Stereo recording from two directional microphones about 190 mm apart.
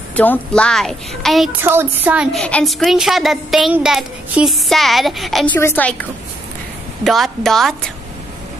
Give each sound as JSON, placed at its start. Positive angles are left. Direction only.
{"t": 0.1, "sound": "a woman's voice", "side_deg": 10}
{"t": 1.6, "sound": "a woman's voice", "side_deg": -10}
{"t": 2.4, "sound": "a woman's voice", "side_deg": 5}
{"t": 7.1, "sound": "a woman's voice", "side_deg": 0}